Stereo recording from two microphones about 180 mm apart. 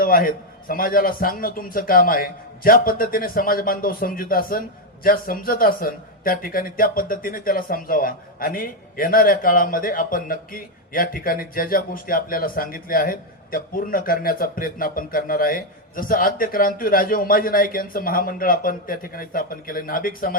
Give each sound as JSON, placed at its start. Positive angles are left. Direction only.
{"t": 0.0, "sound": "speech", "side_deg": 50}